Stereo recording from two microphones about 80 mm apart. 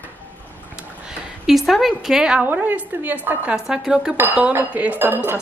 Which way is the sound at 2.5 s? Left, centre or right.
Right.